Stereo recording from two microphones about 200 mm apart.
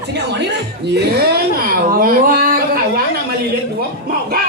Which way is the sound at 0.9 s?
55° right (ahead or behind).